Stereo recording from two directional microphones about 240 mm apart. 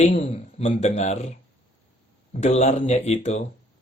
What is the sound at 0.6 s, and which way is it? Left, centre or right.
Speech, left.